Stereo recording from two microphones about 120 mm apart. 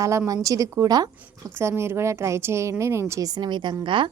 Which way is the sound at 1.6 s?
20° right (ahead or behind).